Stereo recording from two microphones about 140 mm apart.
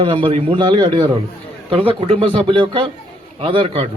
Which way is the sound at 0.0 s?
40° right (ahead or behind).